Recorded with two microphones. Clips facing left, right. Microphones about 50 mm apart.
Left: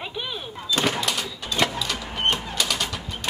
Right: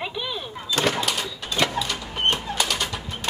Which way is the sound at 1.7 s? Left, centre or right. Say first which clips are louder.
Right 2 dB; right.